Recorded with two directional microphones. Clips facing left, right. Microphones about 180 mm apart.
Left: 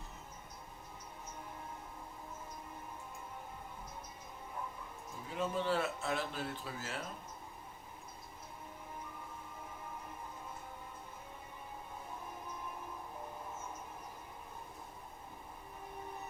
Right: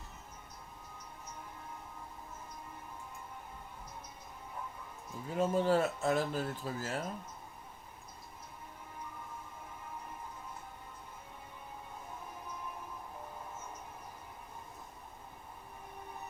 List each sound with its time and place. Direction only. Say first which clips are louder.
5.3 s speech: right 6 dB; 45° right (ahead or behind)